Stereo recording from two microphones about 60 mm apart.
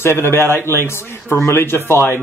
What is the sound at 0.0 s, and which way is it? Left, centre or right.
A man's voice, left.